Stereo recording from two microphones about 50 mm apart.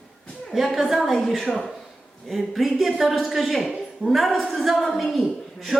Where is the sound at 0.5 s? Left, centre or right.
Centre.